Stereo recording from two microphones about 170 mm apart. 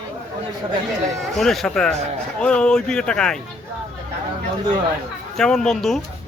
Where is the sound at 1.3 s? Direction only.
Centre (ahead or behind).